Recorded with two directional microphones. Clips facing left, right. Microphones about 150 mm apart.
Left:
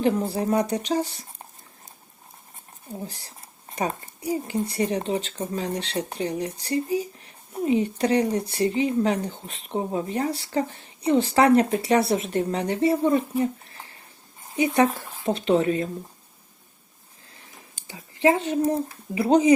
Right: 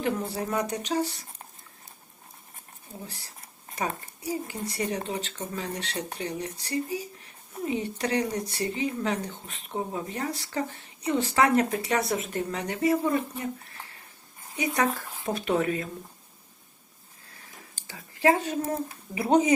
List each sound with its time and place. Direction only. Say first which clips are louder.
0.0 s a woman's voice: left 6 dB; 30° left (ahead or behind)
3.1 s speech: left 2 dB; 30° left (ahead or behind)
13.4 s a sound: left 8 dB; 30° left (ahead or behind)
14.9 s a woman's voice: left 5 dB; 25° left (ahead or behind)
17.7 s speech: left 5 dB; 20° left (ahead or behind)